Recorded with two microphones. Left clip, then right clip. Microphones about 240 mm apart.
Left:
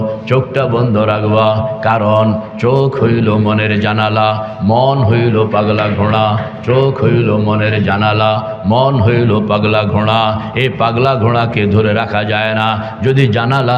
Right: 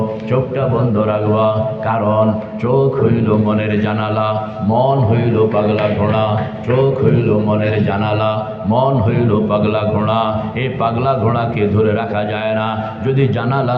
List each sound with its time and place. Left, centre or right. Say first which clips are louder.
0.3 s a man's voice: left 4 dB; left